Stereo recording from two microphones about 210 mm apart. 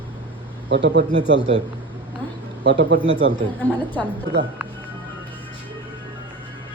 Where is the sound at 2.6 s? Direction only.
55° right (ahead or behind).